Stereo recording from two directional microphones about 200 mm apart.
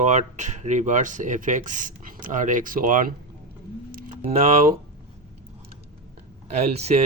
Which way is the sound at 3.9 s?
45° right (ahead or behind).